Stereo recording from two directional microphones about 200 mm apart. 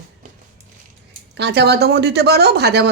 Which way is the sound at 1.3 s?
55° right (ahead or behind).